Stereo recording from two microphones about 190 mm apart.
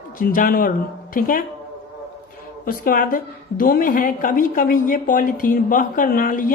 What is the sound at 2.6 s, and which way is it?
A woman's voice, 50° left (ahead or behind).